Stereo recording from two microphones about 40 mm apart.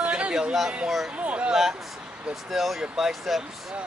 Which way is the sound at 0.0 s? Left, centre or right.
Right.